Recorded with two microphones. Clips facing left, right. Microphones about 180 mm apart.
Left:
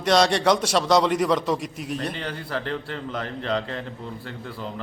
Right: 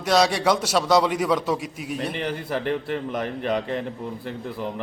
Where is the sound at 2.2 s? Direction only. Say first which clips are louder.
Right 3 dB; 15° right (ahead or behind).